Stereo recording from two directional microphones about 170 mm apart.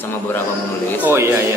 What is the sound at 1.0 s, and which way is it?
Speech, 15° right (ahead or behind).